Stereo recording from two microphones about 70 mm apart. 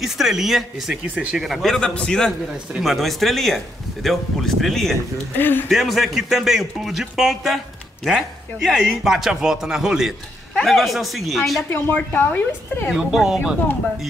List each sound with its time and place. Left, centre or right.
0.0 s a man's voice: centre
1.0 s speech: centre
1.3 s a man's voice: centre
2.8 s a man's voice: centre
5.4 s speech: left
5.7 s a man's voice: centre
11.7 s speech: left
12.9 s a man's voice: centre